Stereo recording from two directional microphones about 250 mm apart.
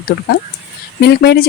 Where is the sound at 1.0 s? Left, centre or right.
Left.